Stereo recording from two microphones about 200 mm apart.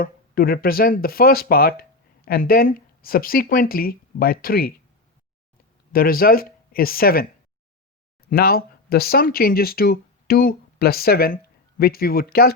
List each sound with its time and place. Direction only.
0.0 s speech: 45° left (ahead or behind)
5.9 s speech: 45° left (ahead or behind)